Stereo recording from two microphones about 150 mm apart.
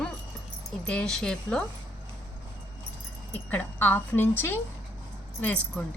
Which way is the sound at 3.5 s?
10° left (ahead or behind).